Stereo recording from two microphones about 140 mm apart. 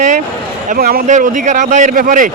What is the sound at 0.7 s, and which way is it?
Speech, 90° right.